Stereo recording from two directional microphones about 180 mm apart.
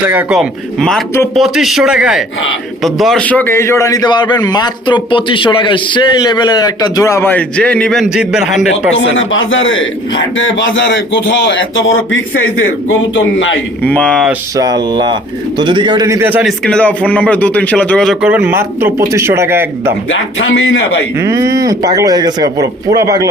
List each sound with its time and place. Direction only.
0.0 s a man's voice: 10° right (ahead or behind)
9.1 s a man's voice: 90° left
13.8 s speech: 5° left (ahead or behind)
14.5 s speech: 20° right (ahead or behind)
20.1 s a man's voice: 90° left
21.2 s speech: 15° right (ahead or behind)